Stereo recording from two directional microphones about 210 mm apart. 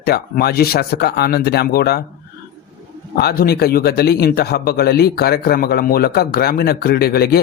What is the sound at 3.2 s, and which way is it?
A man's voice, 50° left (ahead or behind).